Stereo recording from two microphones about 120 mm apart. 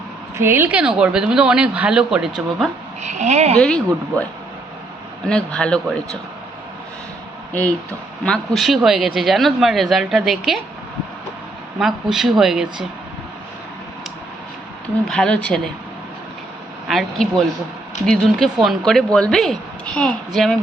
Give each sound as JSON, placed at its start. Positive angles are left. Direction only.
{"t": 0.3, "sound": "speech", "side_deg": -20}
{"t": 3.0, "sound": "speech", "side_deg": -75}
{"t": 5.3, "sound": "a man's voice", "side_deg": 10}
{"t": 7.5, "sound": "a man's voice", "side_deg": 10}
{"t": 11.8, "sound": "speech", "side_deg": -5}
{"t": 15.0, "sound": "a man's voice", "side_deg": 5}
{"t": 16.9, "sound": "speech", "side_deg": 0}